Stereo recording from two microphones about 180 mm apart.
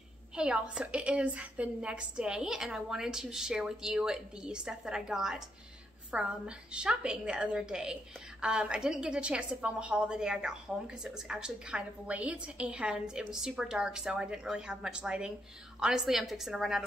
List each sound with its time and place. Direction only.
0.4 s a woman's voice: 5° right (ahead or behind)